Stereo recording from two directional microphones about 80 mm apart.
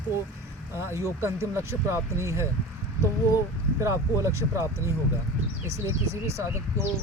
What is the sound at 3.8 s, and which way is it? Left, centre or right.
Speech, right.